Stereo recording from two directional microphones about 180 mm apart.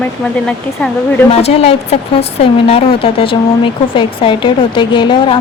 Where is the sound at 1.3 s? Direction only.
35° left (ahead or behind).